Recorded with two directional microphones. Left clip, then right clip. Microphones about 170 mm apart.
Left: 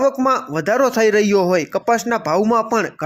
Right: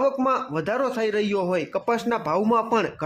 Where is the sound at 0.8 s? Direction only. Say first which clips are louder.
Left 11 dB; 35° left (ahead or behind).